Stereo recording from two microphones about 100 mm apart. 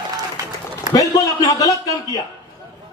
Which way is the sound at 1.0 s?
35° left (ahead or behind).